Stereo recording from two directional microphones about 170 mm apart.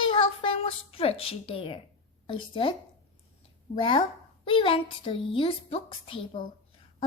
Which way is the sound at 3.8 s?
30° left (ahead or behind).